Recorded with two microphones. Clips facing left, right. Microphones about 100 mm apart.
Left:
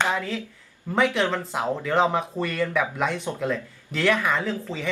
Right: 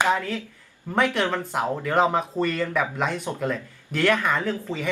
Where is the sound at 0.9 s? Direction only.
Centre (ahead or behind).